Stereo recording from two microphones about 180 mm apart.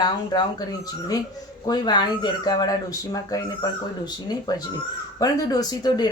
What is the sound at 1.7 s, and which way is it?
Speech, 25° left (ahead or behind).